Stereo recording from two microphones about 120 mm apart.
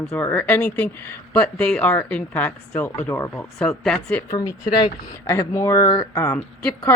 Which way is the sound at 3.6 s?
5° left (ahead or behind).